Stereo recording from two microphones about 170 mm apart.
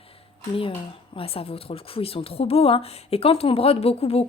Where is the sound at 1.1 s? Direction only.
35° left (ahead or behind).